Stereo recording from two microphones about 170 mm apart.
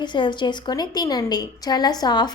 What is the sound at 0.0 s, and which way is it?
A woman's voice, 25° left (ahead or behind).